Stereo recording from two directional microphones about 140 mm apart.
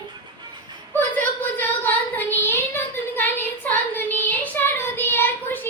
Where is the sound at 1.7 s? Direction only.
15° left (ahead or behind).